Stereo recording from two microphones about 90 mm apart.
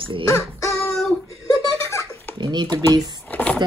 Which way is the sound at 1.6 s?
35° left (ahead or behind).